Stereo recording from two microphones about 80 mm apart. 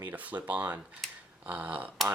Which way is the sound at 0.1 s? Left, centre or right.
Centre.